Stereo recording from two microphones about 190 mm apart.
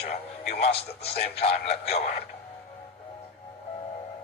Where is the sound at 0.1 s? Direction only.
30° left (ahead or behind).